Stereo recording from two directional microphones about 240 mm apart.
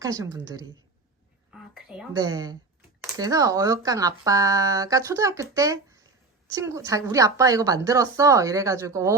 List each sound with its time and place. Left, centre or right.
0.0 s speech: centre
2.1 s speech: centre